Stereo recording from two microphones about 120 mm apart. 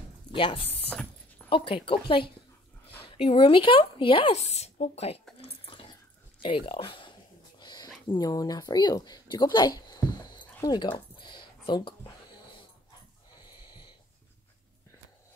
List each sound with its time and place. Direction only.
0.3 s a woman's voice: 45° left (ahead or behind); by 5.2 s 60° left (ahead or behind)
5.4 s a sound: 50° left (ahead or behind)
8.2 s speech: 30° left (ahead or behind)
13.6 s wheeze: 40° left (ahead or behind)